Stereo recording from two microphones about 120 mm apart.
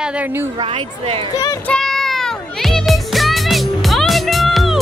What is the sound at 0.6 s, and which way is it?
Speech, 50° right (ahead or behind).